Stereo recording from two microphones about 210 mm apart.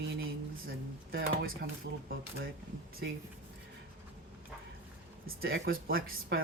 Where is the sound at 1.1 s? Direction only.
50° right (ahead or behind).